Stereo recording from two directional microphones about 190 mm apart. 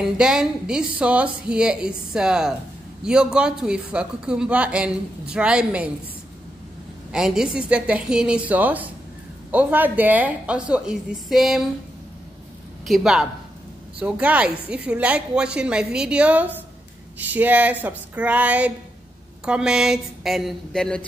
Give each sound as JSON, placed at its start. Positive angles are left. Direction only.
{"t": 0.0, "sound": "speech", "side_deg": -5}
{"t": 7.1, "sound": "a woman's voice", "side_deg": -5}
{"t": 12.8, "sound": "a woman's voice", "side_deg": 0}